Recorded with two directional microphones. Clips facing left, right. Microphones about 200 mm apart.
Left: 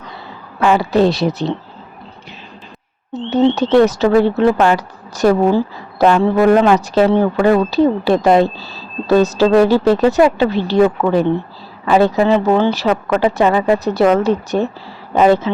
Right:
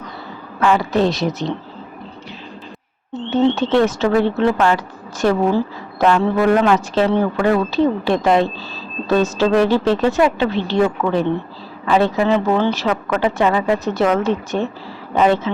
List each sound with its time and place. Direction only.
0.6 s speech: 30° left (ahead or behind)
3.1 s speech: 40° left (ahead or behind)